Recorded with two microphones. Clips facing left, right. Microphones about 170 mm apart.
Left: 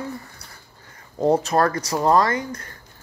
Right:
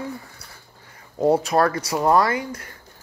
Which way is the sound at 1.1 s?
5° right (ahead or behind).